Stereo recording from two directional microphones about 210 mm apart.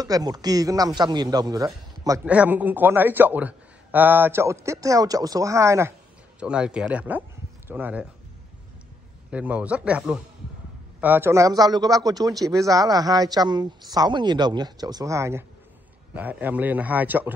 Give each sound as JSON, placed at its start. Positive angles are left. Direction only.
{"t": 0.0, "sound": "a man's voice", "side_deg": -20}
{"t": 9.3, "sound": "a man's voice", "side_deg": -5}